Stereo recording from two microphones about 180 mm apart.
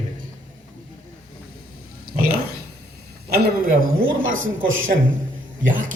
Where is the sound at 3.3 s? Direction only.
60° right (ahead or behind).